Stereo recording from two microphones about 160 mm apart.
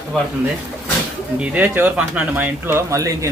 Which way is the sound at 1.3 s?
10° right (ahead or behind).